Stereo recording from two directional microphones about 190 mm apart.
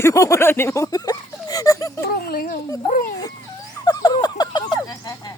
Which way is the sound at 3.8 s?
20° left (ahead or behind).